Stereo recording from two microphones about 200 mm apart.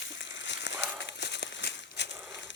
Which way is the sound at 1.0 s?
60° left (ahead or behind).